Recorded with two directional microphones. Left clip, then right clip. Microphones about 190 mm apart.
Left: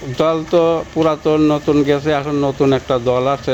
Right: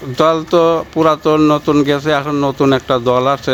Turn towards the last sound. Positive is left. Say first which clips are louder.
# right 3 dB
turn(degrees=-40)  # may be behind; listen again after turning